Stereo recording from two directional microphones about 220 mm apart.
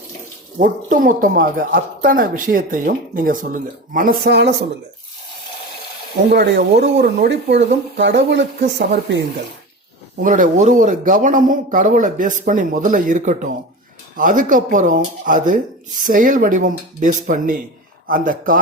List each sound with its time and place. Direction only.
0.6 s speech: 40° right (ahead or behind)
6.3 s speech: 50° right (ahead or behind)
10.2 s speech: 35° right (ahead or behind)